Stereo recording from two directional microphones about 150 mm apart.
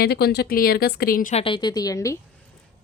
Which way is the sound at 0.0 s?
90° left.